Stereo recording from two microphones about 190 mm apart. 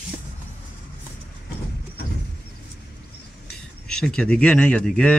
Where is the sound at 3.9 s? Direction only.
5° left (ahead or behind).